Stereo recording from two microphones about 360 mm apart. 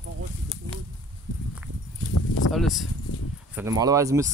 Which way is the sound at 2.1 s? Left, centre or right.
Left.